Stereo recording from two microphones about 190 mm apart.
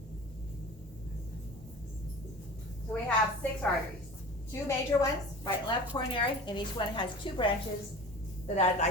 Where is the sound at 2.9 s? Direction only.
5° left (ahead or behind).